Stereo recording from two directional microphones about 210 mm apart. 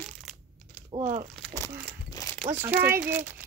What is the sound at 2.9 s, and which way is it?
Speech, 10° right (ahead or behind).